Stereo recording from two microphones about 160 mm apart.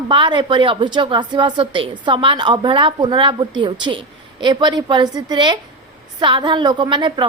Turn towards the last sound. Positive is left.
turn(degrees=-30)  # may be behind; listen again after turning